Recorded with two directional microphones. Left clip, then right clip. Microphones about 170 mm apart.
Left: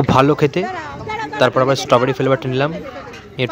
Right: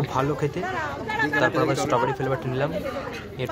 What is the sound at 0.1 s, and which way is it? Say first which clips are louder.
Speech: left 13 dB; 45° left (ahead or behind).